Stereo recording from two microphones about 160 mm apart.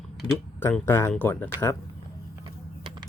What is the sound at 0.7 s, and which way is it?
Speech, 15° left (ahead or behind).